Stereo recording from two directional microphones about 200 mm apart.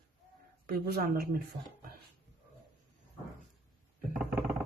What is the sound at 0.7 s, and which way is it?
Speech, 50° right (ahead or behind).